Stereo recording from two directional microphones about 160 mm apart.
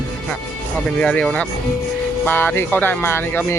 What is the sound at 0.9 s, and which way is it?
Speech, 5° left (ahead or behind).